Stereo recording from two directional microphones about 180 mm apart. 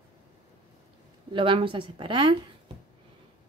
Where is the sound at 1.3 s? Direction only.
30° right (ahead or behind).